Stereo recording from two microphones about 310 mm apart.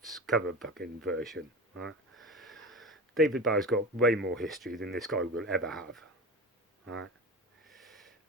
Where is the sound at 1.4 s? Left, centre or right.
Right.